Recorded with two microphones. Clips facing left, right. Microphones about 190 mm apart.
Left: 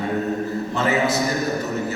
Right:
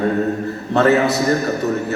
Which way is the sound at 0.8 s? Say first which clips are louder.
Right 7 dB; 65° right (ahead or behind).